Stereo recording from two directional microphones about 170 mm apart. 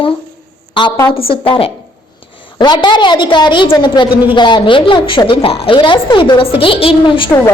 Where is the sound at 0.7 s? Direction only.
30° left (ahead or behind).